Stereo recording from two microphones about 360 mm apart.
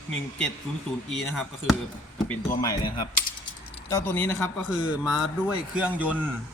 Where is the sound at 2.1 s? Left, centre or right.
Centre.